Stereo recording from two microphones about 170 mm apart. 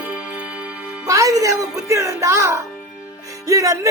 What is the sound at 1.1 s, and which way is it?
Music, 20° right (ahead or behind).